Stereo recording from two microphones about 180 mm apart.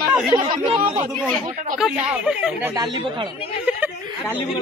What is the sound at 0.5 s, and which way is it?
Speech, 25° right (ahead or behind).